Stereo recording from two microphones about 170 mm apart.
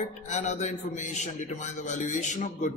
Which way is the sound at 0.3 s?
45° left (ahead or behind).